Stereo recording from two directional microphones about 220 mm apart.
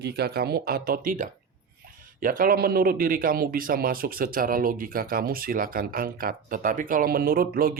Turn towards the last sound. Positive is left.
turn(degrees=-40)  # may be behind; listen again after turning